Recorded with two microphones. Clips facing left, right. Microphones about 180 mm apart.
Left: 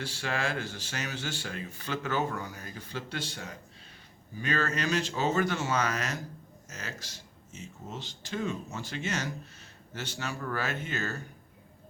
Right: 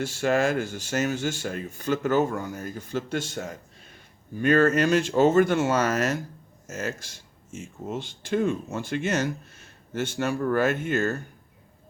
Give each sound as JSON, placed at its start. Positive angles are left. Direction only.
{"t": 0.0, "sound": "speech", "side_deg": -45}